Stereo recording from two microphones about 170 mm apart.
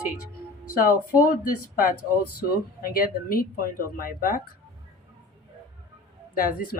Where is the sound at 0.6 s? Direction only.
55° left (ahead or behind).